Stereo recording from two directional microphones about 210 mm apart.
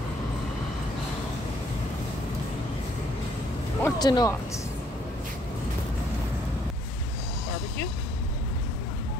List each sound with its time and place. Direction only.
3.8 s speech: 20° left (ahead or behind)